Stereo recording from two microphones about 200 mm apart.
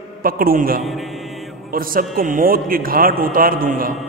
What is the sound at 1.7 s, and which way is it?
A man's voice, 45° right (ahead or behind).